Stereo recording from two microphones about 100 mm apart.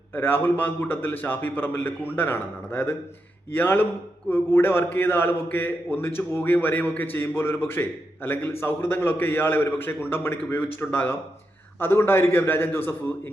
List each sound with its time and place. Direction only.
0.1 s a man's voice: 20° left (ahead or behind)